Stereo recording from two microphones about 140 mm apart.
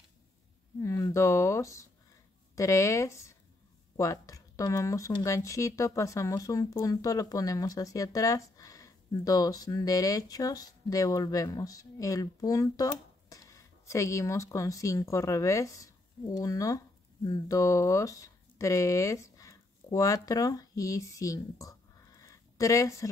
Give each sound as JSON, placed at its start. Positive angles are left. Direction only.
{"t": 0.7, "sound": "speech", "side_deg": 20}